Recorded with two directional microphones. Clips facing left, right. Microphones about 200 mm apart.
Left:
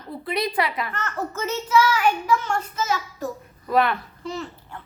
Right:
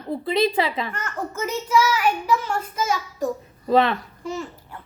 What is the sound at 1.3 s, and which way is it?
A child's voice, 15° right (ahead or behind).